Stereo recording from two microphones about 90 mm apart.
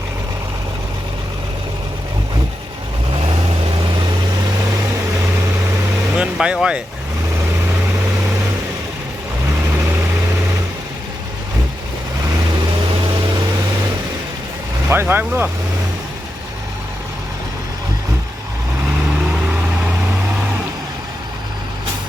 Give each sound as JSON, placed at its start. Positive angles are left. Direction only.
{"t": 6.1, "sound": "vehicle", "side_deg": -10}
{"t": 14.8, "sound": "speech", "side_deg": -25}